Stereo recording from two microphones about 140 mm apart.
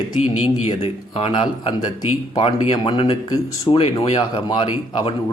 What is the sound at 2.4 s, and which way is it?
A man's voice, 45° left (ahead or behind).